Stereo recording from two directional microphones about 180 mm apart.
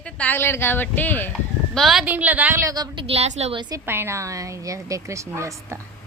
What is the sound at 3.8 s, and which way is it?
A woman's voice, 15° right (ahead or behind).